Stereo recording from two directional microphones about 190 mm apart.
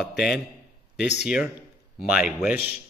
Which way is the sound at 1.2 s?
5° right (ahead or behind).